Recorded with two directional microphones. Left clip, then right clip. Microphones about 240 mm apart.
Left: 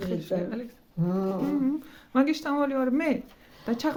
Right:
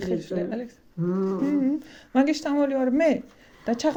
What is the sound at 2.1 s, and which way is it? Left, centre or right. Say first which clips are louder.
A woman's voice: right 2 dB; centre.